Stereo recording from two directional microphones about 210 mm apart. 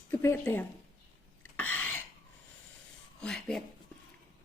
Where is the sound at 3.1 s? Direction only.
5° left (ahead or behind).